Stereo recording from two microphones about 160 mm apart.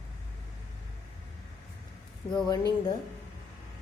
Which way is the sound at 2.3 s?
25° left (ahead or behind).